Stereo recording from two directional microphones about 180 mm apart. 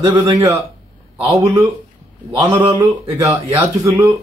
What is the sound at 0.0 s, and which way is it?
Speech, 15° right (ahead or behind).